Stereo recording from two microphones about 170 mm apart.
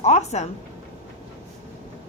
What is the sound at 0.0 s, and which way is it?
Speech, 40° left (ahead or behind).